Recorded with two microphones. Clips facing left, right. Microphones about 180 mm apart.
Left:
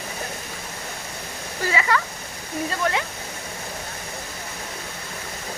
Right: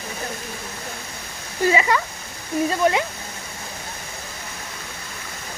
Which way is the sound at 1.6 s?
20° right (ahead or behind).